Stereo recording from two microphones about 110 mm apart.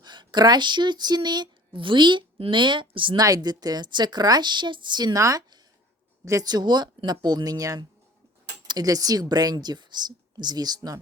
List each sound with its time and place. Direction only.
0.0 s speech: 45° right (ahead or behind)
3.2 s a woman's voice: 35° right (ahead or behind)